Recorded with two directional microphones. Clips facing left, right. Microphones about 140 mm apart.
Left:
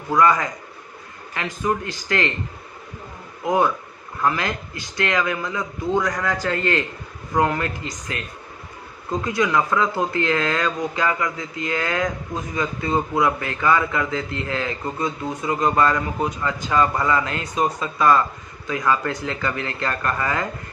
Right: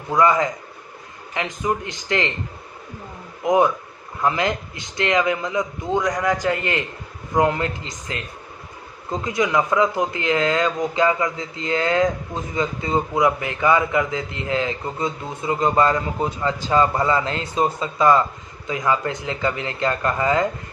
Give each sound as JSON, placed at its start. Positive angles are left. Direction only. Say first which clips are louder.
{"t": 0.1, "sound": "a man's voice", "louder": "right 1 dB", "side_deg": -20}
{"t": 3.4, "sound": "a man's voice", "louder": "right 2 dB", "side_deg": -20}
{"t": 9.2, "sound": "a man's voice", "louder": "right 1 dB", "side_deg": -20}